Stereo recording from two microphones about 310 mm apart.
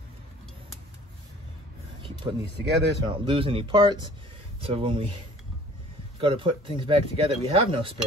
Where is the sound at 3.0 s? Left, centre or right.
Centre.